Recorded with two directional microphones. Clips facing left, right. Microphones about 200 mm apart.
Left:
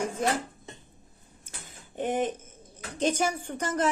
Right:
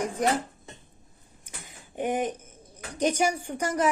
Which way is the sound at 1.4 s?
15° right (ahead or behind).